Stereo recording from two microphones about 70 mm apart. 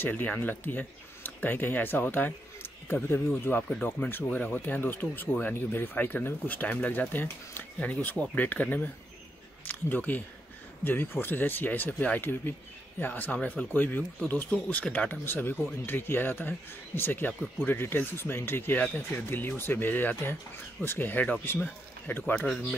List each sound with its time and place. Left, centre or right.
0.0 s speech: left
3.6 s speech: centre